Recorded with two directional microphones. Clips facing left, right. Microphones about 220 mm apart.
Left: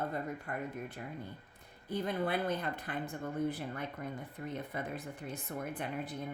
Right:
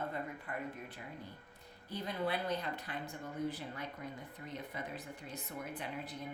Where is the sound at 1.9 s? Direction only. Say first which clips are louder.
Left 4 dB; 50° left (ahead or behind).